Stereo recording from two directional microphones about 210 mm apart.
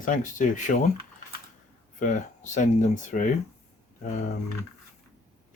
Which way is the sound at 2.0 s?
40° left (ahead or behind).